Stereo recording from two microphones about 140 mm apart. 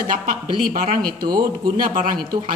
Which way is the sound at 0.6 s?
90° right.